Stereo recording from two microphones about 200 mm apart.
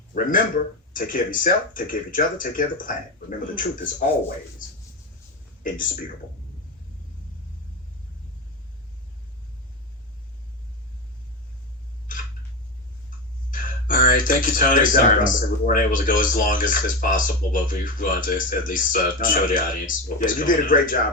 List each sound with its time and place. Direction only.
0.1 s speech: 45° left (ahead or behind)
5.6 s speech: 40° left (ahead or behind)
13.5 s speech: 45° left (ahead or behind)